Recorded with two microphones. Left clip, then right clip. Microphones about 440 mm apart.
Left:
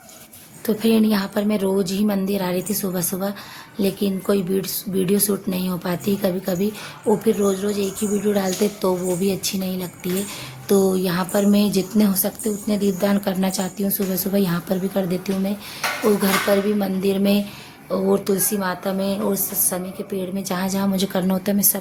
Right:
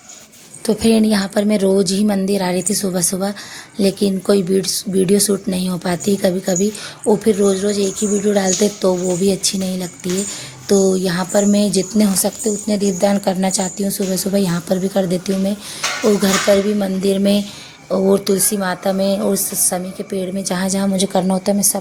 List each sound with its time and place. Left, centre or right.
0.7 s a woman's voice: left